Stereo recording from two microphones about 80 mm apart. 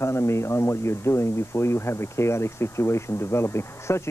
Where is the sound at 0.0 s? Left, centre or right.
Left.